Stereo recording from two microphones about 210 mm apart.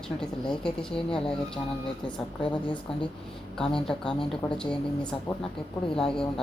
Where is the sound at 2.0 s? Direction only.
20° left (ahead or behind).